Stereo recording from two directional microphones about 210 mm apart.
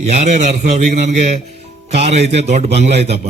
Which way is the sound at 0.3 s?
35° right (ahead or behind).